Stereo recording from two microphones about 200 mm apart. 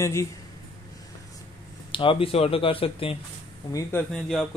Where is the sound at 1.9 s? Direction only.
25° left (ahead or behind).